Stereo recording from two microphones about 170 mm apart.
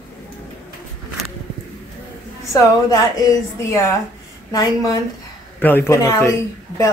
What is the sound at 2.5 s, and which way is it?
A woman's voice, 20° left (ahead or behind).